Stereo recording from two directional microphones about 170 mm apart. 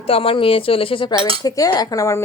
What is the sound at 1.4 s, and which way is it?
Speech, 20° left (ahead or behind).